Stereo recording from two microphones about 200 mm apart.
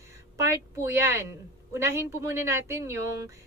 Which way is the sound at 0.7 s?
15° right (ahead or behind).